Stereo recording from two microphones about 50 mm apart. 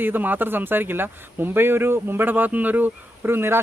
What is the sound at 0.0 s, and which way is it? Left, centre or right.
A man's voice, right.